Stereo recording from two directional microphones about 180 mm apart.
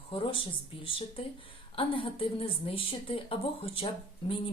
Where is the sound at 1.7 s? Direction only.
30° left (ahead or behind).